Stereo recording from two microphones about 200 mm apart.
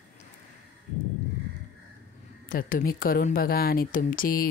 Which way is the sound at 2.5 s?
45° left (ahead or behind).